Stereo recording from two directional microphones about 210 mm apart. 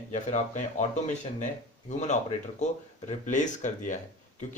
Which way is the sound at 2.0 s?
35° left (ahead or behind).